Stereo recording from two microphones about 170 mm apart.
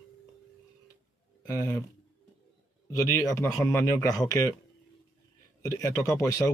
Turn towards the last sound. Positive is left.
turn(degrees=20)  # may be behind; listen again after turning